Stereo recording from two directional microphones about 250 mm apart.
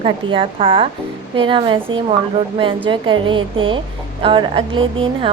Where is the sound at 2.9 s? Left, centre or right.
Centre.